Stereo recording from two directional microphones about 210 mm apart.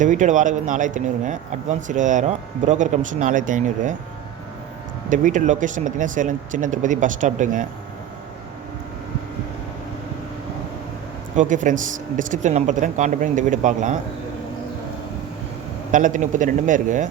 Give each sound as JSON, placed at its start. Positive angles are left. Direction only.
{"t": 0.0, "sound": "speech", "side_deg": -35}
{"t": 5.0, "sound": "speech", "side_deg": -35}
{"t": 11.3, "sound": "speech", "side_deg": -35}
{"t": 15.9, "sound": "speech", "side_deg": -35}